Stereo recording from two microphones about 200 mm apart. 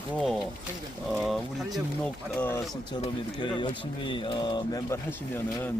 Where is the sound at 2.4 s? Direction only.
10° left (ahead or behind).